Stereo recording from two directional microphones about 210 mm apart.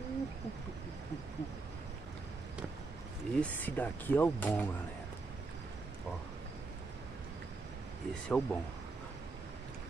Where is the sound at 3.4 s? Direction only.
10° left (ahead or behind).